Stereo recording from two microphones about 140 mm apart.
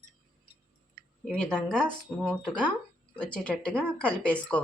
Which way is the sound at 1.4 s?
5° left (ahead or behind).